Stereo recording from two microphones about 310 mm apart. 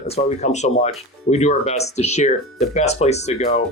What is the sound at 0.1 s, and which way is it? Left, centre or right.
Speech, left.